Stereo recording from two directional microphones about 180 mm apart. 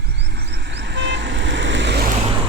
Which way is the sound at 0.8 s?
75° right (ahead or behind).